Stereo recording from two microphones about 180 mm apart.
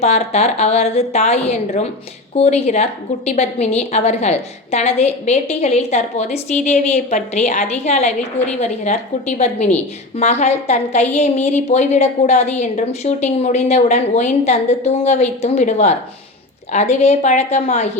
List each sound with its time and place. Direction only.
0.0 s a woman's voice: 40° left (ahead or behind)